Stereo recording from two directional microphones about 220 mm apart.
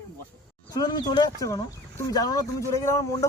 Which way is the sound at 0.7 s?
20° left (ahead or behind).